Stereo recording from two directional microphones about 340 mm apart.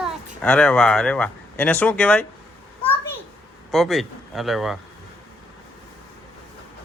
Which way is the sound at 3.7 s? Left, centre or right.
Centre.